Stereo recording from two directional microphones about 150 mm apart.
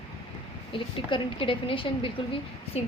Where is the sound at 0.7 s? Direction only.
35° left (ahead or behind).